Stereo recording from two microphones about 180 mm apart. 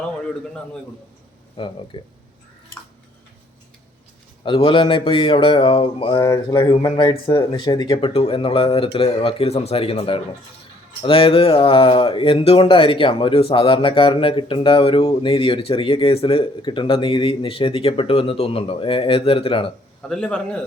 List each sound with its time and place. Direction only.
1.5 s speech: 25° left (ahead or behind)
4.4 s speech: 30° left (ahead or behind)
20.0 s a man's voice: 5° left (ahead or behind)